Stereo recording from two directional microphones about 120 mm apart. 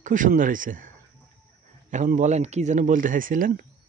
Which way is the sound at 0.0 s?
90° right.